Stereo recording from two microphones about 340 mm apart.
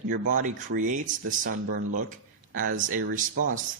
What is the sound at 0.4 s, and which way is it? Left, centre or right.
Speech, right.